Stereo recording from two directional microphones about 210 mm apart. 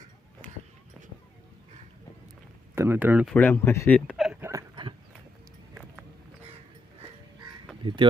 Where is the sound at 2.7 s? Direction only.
10° right (ahead or behind).